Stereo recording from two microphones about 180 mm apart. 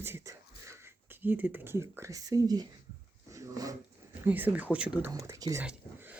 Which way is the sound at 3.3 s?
20° right (ahead or behind).